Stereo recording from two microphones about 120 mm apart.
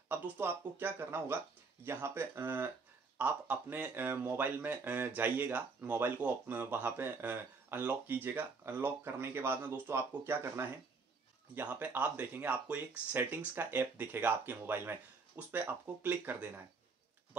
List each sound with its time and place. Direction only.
0.1 s speech: 15° right (ahead or behind)